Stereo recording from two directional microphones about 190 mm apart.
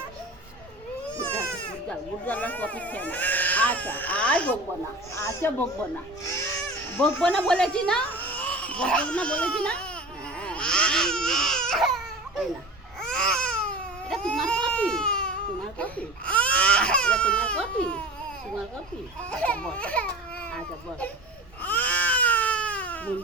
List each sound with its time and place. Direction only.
1.9 s speech: 10° left (ahead or behind)
6.2 s baby cry: 15° left (ahead or behind)
6.9 s speech: 5° left (ahead or behind)
10.3 s baby cry: 5° left (ahead or behind)
13.0 s baby cry: 5° left (ahead or behind)
19.3 s baby cry: 5° left (ahead or behind)
21.6 s baby cry: 10° left (ahead or behind)